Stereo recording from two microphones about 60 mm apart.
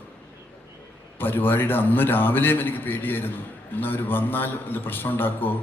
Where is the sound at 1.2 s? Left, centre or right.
Left.